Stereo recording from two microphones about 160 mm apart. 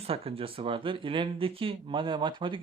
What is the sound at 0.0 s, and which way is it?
Speech, 35° right (ahead or behind).